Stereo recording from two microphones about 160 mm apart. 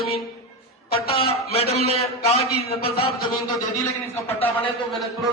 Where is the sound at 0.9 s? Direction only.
35° left (ahead or behind).